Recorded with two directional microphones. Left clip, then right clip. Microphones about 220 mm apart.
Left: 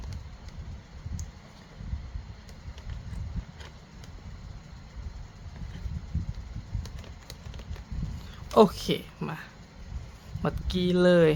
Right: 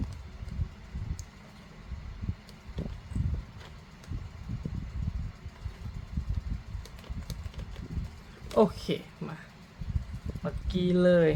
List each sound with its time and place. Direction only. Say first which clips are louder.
8.5 s speech: left 5 dB; 25° left (ahead or behind)
10.4 s speech: left 3 dB; 20° left (ahead or behind)